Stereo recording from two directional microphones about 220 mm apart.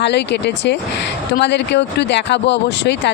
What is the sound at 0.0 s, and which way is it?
Speech, 50° left (ahead or behind).